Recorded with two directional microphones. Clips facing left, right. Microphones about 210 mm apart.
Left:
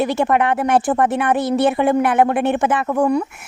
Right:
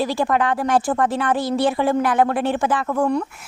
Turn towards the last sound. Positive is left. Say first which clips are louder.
# left 3 dB
turn(degrees=15)  # may be behind; listen again after turning